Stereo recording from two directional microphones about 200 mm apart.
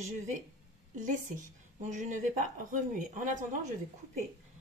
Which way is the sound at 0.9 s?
40° right (ahead or behind).